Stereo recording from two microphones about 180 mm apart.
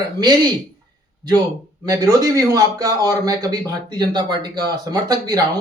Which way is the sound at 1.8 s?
20° right (ahead or behind).